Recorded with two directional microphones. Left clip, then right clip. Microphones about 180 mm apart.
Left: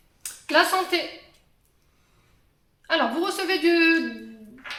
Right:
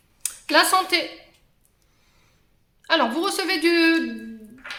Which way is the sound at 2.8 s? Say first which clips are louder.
Right 2 dB; 35° right (ahead or behind).